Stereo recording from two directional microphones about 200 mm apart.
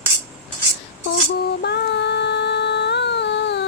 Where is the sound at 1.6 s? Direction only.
60° left (ahead or behind).